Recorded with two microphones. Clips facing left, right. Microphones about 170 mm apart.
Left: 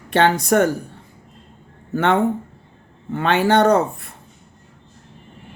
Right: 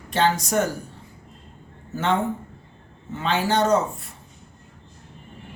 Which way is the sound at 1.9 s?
60° left (ahead or behind).